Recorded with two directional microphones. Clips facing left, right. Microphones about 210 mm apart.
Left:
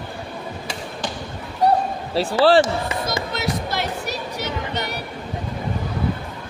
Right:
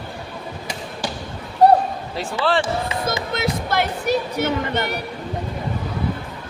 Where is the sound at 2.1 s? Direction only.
35° left (ahead or behind).